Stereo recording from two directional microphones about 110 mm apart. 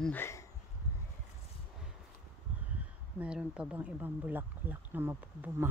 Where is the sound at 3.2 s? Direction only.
10° right (ahead or behind).